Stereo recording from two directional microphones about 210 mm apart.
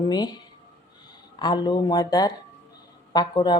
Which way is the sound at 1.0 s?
20° left (ahead or behind).